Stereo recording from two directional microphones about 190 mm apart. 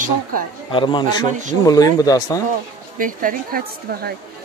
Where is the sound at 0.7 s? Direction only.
25° left (ahead or behind).